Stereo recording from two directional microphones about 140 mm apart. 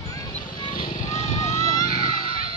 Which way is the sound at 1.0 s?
60° left (ahead or behind).